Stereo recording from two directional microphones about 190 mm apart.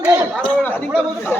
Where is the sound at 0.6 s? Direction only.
10° left (ahead or behind).